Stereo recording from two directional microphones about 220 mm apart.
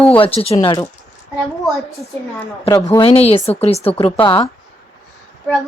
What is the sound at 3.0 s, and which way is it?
Speech, 25° left (ahead or behind).